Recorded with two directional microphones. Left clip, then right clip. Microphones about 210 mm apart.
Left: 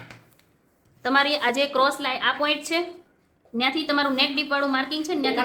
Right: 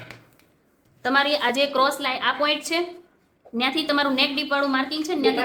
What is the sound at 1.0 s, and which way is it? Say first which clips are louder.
A woman's voice: even; 10° right (ahead or behind).